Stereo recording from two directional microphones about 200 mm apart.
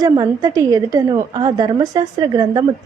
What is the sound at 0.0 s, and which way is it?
A woman's voice, 20° right (ahead or behind).